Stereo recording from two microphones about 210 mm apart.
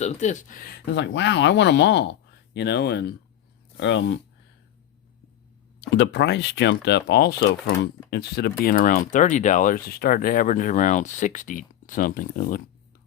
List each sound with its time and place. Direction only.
0.0 s speech: 35° left (ahead or behind); by 3.2 s 50° left (ahead or behind)
3.8 s speech: 60° left (ahead or behind)
5.8 s speech: 55° left (ahead or behind)